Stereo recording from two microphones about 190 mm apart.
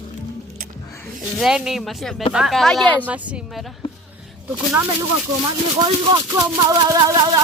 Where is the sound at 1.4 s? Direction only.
5° right (ahead or behind).